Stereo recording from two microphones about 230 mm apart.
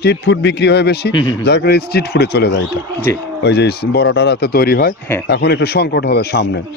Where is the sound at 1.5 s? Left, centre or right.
Left.